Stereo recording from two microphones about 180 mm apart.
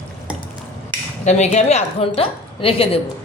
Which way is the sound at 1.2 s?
40° left (ahead or behind).